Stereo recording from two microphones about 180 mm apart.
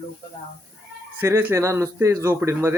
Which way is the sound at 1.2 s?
15° right (ahead or behind).